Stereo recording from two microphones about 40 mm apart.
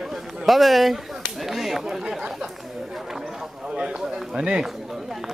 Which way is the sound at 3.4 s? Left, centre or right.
Right.